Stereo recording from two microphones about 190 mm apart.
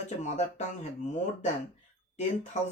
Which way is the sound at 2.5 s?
40° left (ahead or behind).